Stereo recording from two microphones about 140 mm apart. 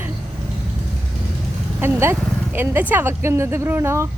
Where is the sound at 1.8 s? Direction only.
15° right (ahead or behind).